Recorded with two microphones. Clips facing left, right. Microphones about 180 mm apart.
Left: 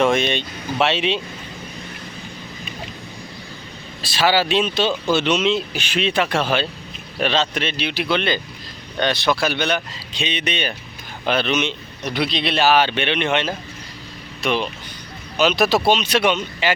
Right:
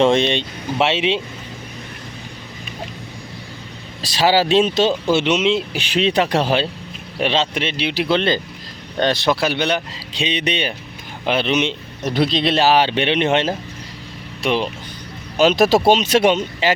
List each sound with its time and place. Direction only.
0.0 s speech: 30° right (ahead or behind)
4.0 s speech: 35° right (ahead or behind)
5.1 s speech: 25° right (ahead or behind)
11.3 s speech: 25° right (ahead or behind)
12.0 s speech: 40° right (ahead or behind)
15.4 s speech: 45° right (ahead or behind)